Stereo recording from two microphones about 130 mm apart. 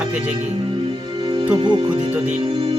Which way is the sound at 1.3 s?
35° right (ahead or behind).